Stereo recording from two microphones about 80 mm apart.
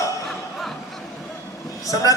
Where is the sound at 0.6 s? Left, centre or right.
Centre.